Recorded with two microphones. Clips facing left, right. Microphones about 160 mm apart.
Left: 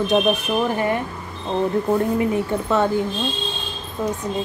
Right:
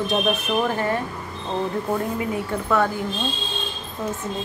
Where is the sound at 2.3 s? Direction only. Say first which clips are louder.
Left 2 dB; 25° left (ahead or behind).